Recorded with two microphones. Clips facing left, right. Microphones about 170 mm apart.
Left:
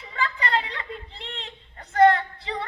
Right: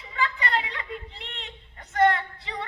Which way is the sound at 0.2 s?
35° left (ahead or behind).